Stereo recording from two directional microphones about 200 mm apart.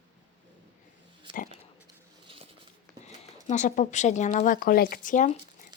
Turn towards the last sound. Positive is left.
turn(degrees=40)  # may be behind; listen again after turning